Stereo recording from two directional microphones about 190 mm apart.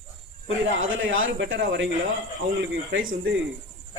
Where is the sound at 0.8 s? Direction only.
90° right.